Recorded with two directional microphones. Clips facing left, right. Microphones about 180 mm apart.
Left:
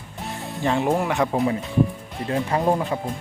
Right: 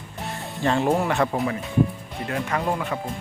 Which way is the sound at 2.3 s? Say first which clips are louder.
Left 4 dB; 30° left (ahead or behind).